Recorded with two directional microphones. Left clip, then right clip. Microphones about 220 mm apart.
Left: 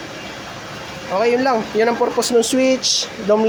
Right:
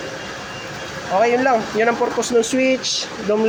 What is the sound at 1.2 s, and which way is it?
Speech, 20° left (ahead or behind).